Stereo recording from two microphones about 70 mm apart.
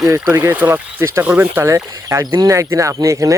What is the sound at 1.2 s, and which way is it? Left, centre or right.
Speech, right.